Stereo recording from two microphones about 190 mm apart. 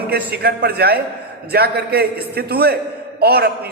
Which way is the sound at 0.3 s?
55° right (ahead or behind).